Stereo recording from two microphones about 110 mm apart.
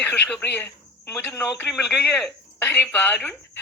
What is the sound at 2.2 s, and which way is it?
Speech, 5° left (ahead or behind).